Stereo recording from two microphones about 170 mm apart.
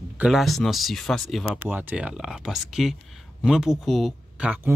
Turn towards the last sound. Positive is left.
turn(degrees=-5)  # may be behind; listen again after turning